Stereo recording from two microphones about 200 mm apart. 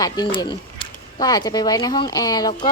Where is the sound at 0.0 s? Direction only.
20° left (ahead or behind).